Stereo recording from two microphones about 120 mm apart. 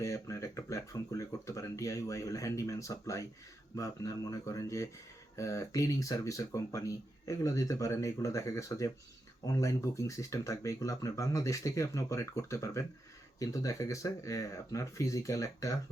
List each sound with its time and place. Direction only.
0.0 s speech: 25° left (ahead or behind)